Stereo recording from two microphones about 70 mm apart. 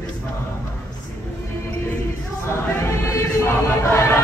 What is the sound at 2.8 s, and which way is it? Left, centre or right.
Chant, left.